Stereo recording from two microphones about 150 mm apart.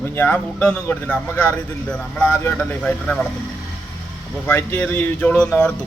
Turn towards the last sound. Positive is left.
turn(degrees=5)  # may be behind; listen again after turning